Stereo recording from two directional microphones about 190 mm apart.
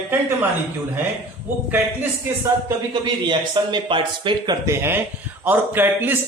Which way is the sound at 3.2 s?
25° right (ahead or behind).